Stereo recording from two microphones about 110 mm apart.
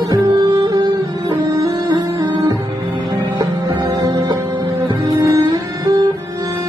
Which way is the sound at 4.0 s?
40° right (ahead or behind).